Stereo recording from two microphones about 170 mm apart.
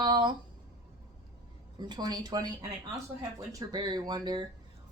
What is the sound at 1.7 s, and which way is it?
A woman's voice, 25° right (ahead or behind).